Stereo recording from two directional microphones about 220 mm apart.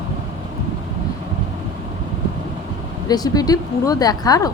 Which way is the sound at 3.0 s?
15° left (ahead or behind).